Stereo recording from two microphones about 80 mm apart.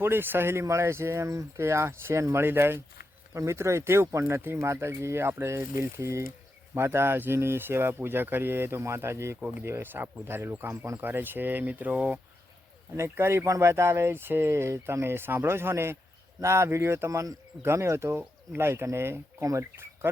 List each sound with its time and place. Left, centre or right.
0.0 s speech: right
13.0 s speech: right